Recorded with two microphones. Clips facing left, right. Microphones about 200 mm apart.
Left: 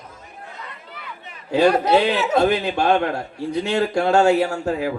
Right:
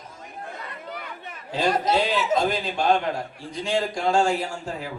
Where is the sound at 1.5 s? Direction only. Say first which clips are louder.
Left 7 dB; 65° left (ahead or behind).